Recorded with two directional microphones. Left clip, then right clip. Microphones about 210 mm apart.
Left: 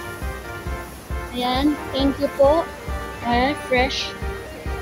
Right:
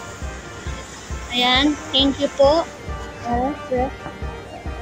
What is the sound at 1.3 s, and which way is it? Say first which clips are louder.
Music: right 4 dB; 10° left (ahead or behind).